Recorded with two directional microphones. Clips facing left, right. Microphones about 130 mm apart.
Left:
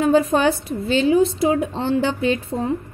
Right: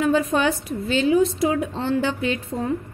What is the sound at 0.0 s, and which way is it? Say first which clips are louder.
A woman's voice: left 4 dB; 30° left (ahead or behind).